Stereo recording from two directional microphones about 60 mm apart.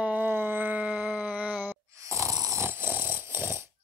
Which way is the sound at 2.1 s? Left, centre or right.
Right.